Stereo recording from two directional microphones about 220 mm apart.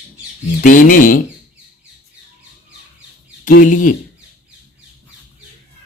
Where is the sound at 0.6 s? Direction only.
35° left (ahead or behind).